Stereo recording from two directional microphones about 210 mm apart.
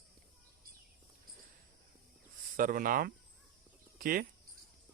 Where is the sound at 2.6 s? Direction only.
40° right (ahead or behind).